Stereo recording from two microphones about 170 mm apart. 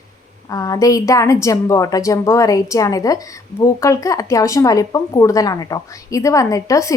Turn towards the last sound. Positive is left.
turn(degrees=20)  # may be behind; listen again after turning